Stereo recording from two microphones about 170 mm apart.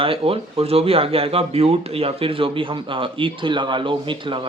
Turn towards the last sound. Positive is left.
turn(degrees=-30)  # may be behind; listen again after turning